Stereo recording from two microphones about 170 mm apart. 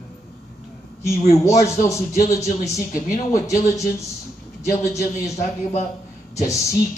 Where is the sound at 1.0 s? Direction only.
20° left (ahead or behind).